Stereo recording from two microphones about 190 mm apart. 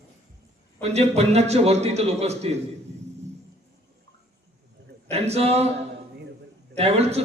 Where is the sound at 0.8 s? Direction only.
35° right (ahead or behind).